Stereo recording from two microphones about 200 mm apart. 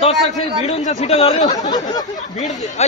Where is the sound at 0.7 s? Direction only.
35° left (ahead or behind).